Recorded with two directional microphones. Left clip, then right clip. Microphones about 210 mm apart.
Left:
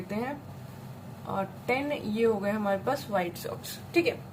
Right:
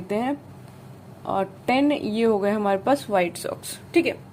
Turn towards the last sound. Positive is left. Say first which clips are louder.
# right 5 dB
turn(degrees=-45)  # may be behind; listen again after turning